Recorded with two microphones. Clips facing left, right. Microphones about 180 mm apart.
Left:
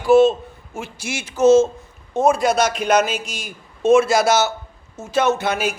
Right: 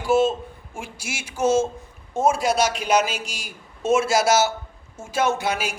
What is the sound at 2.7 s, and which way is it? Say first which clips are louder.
Speech: left 5 dB; 55° left (ahead or behind).